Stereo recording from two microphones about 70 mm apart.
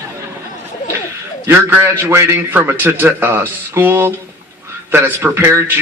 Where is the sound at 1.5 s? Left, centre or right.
Right.